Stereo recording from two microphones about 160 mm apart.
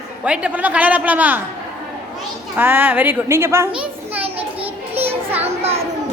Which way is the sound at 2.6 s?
10° right (ahead or behind).